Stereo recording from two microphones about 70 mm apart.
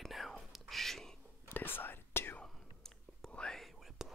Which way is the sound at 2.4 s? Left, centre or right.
Centre.